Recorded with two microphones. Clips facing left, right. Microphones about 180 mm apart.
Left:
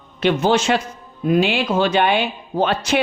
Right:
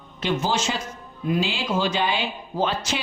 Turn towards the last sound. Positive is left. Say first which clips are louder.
# left 7 dB
turn(degrees=65)  # may be behind; listen again after turning